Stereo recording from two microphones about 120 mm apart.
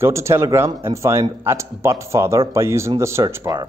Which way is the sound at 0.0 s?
25° right (ahead or behind).